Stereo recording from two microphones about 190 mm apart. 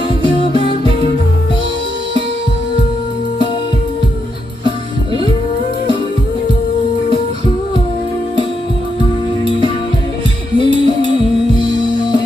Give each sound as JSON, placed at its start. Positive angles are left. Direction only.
{"t": 0.3, "sound": "music", "side_deg": 25}
{"t": 10.6, "sound": "music", "side_deg": 25}